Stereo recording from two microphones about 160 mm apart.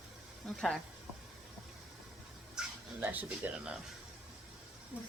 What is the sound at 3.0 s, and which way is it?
Speech, 10° right (ahead or behind).